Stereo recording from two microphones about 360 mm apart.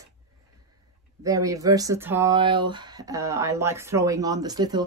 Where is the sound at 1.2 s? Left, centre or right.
Centre.